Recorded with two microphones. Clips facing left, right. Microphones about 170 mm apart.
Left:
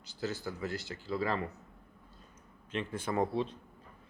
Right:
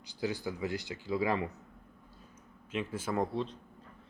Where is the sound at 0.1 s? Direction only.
15° right (ahead or behind).